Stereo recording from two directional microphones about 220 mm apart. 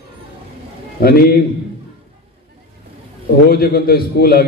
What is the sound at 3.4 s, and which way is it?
A man's voice, 45° left (ahead or behind).